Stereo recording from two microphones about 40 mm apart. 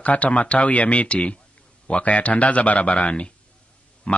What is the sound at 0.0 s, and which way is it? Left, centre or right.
Speech, left.